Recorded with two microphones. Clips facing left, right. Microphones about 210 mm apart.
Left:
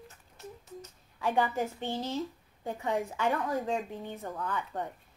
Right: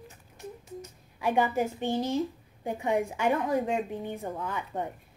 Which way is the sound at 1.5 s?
15° right (ahead or behind).